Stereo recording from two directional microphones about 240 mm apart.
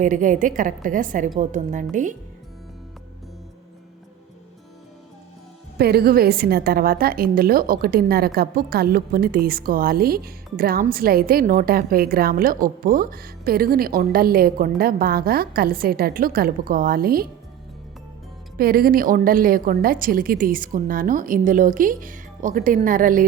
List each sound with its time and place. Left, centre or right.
0.0 s a woman's voice: right
5.7 s a woman's voice: right
18.5 s a woman's voice: right